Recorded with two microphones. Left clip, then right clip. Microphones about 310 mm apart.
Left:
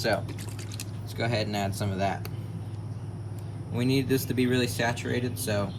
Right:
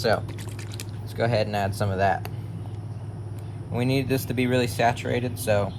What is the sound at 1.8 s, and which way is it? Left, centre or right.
Speech, centre.